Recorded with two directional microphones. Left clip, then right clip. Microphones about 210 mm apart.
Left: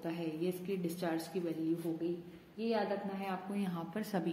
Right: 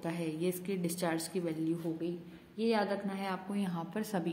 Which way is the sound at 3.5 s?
15° right (ahead or behind).